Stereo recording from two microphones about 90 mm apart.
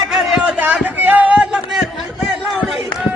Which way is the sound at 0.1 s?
10° right (ahead or behind).